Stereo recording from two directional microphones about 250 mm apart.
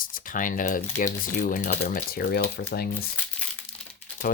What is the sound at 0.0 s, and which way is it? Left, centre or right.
Speech, left.